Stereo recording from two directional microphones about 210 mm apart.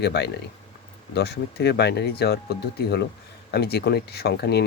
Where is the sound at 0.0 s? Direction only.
50° left (ahead or behind).